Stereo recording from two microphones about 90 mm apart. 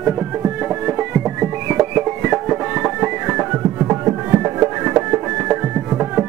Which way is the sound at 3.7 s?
35° right (ahead or behind).